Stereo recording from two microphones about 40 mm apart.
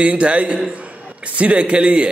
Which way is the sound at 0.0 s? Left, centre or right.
Right.